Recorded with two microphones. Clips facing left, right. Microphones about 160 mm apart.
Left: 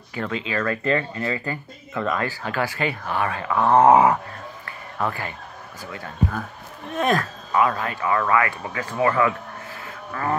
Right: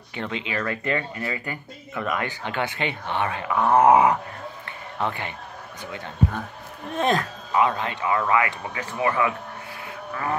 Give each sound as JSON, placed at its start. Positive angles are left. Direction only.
{"t": 0.1, "sound": "speech", "side_deg": -25}
{"t": 0.8, "sound": "speech", "side_deg": 35}
{"t": 2.1, "sound": "speech", "side_deg": -20}
{"t": 3.6, "sound": "dog", "side_deg": 30}
{"t": 4.6, "sound": "a sound", "side_deg": -25}
{"t": 7.0, "sound": "speech", "side_deg": -25}